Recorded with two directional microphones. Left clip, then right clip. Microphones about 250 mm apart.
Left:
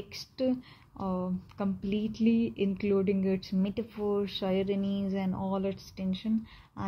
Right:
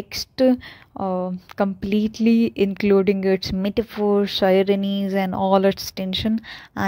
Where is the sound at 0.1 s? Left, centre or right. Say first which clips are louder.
Right 13 dB; right.